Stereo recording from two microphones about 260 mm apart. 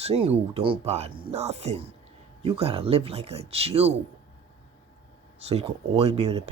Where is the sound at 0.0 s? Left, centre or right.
Right.